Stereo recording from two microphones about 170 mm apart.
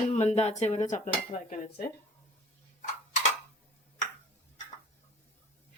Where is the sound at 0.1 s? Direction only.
40° left (ahead or behind).